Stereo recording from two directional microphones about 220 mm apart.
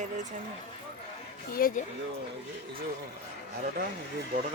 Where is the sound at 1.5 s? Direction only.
40° left (ahead or behind).